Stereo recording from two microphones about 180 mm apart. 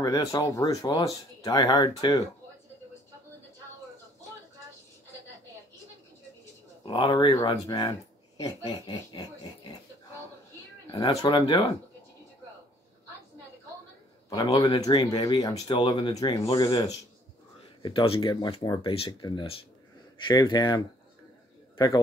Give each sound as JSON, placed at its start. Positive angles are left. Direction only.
{"t": 0.0, "sound": "speech", "side_deg": 20}
{"t": 6.8, "sound": "speech", "side_deg": 25}
{"t": 10.9, "sound": "speech", "side_deg": 20}
{"t": 14.3, "sound": "a man's voice", "side_deg": 20}